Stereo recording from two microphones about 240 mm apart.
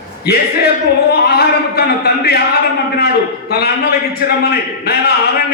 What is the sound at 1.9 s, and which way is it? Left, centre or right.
Speech, left.